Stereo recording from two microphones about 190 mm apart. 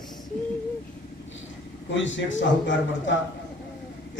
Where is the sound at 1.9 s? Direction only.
80° left.